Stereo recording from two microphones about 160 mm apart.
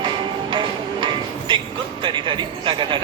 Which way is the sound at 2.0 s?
30° right (ahead or behind).